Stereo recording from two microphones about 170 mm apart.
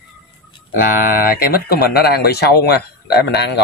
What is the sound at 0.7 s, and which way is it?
Speech, 55° left (ahead or behind).